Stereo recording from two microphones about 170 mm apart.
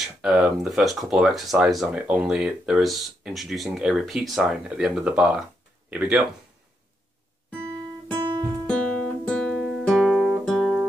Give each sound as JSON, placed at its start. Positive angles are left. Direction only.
{"t": 0.0, "sound": "speech", "side_deg": -5}
{"t": 8.6, "sound": "guitar", "side_deg": 5}